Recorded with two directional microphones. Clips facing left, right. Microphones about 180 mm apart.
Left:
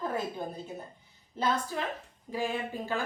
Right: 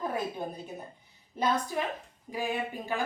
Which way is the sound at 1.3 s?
15° right (ahead or behind).